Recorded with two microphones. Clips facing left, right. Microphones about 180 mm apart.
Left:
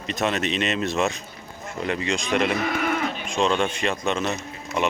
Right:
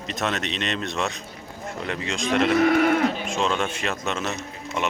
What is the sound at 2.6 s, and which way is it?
Livestock, 55° right (ahead or behind).